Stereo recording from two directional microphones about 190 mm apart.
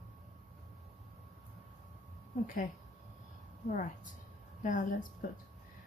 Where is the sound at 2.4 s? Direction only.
45° left (ahead or behind).